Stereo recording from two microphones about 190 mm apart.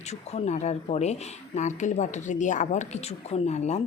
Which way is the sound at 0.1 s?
35° left (ahead or behind).